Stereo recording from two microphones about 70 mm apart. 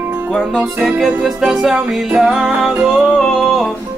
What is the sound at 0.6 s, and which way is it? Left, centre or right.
Music, centre.